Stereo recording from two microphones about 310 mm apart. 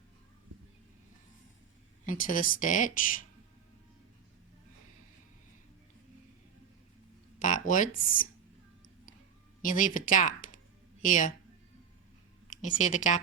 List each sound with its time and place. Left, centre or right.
2.0 s speech: left
7.3 s speech: left
9.6 s speech: left
12.8 s speech: left